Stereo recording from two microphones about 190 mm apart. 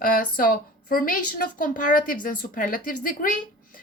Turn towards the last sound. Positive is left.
turn(degrees=45)  # may be behind; listen again after turning